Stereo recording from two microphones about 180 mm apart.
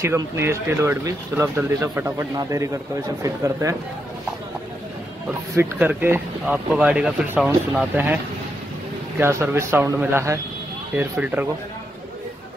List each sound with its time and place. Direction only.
0.0 s speech: 15° right (ahead or behind)
5.6 s speech: 10° right (ahead or behind)
9.2 s speech: 15° right (ahead or behind)